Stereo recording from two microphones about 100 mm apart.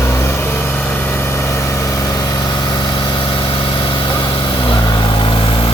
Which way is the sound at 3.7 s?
60° left (ahead or behind).